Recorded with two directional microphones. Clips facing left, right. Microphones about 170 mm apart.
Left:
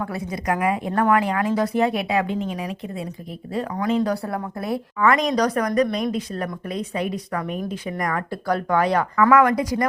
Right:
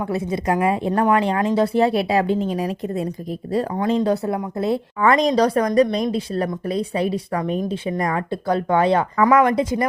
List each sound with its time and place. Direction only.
0.0 s a woman's voice: 25° right (ahead or behind)
3.8 s a woman's voice: 30° right (ahead or behind)